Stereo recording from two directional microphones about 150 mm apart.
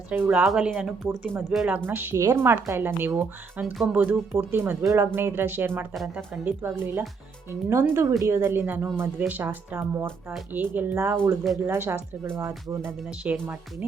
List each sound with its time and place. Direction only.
0.1 s speech: 10° right (ahead or behind)
5.9 s speech: centre (ahead or behind)
6.4 s speech: 15° right (ahead or behind)